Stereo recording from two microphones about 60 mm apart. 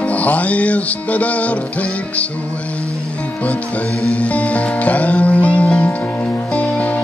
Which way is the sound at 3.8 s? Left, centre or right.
Right.